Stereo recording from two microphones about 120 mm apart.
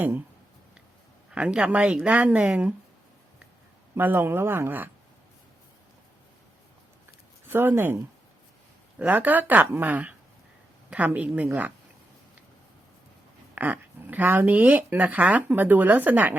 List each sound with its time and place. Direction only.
1.3 s speech: 10° right (ahead or behind)
3.9 s speech: 15° right (ahead or behind)
7.4 s speech: 20° right (ahead or behind)
9.0 s speech: 15° right (ahead or behind)
13.6 s speech: 15° right (ahead or behind)